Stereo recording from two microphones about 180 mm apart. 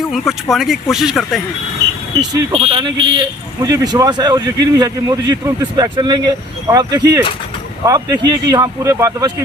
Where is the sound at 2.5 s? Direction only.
30° right (ahead or behind).